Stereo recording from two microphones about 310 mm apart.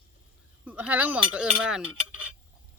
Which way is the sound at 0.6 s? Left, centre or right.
Centre.